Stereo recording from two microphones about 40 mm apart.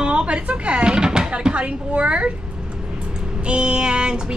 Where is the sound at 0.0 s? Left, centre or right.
Right.